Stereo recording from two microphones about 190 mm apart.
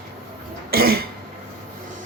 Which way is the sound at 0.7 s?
55° right (ahead or behind).